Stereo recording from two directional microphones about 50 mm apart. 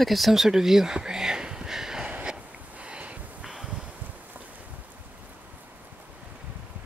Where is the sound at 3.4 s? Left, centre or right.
Centre.